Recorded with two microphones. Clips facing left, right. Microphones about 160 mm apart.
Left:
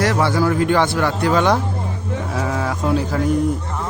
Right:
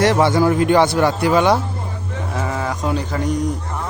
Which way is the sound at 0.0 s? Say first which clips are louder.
Right 3 dB; 20° right (ahead or behind).